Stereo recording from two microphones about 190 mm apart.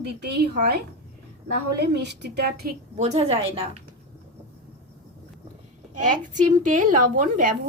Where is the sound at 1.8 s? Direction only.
60° right (ahead or behind).